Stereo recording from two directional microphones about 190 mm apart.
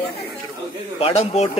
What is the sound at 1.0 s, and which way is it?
Speech, 30° left (ahead or behind).